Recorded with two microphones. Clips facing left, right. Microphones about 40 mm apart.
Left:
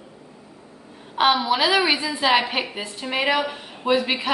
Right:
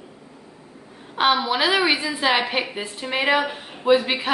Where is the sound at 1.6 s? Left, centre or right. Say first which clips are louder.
Even; centre.